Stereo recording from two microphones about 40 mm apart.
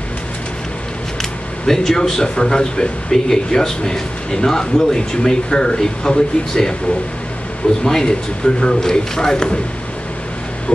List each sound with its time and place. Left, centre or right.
1.7 s speech: centre
7.8 s speech: centre